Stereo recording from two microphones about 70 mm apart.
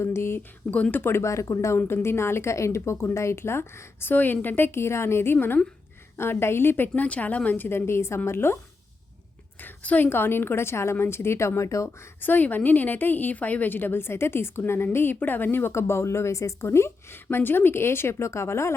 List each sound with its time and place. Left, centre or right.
0.0 s speech: left
0.7 s speech: left
1.8 s speech: left
9.6 s speech: left
12.2 s a woman's voice: left